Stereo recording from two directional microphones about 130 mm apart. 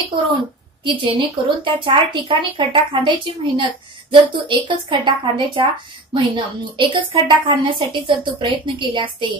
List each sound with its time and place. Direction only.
0.8 s a woman's voice: 40° right (ahead or behind)